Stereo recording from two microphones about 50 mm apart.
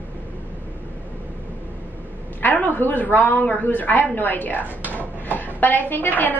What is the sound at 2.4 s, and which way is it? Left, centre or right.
A woman's voice, left.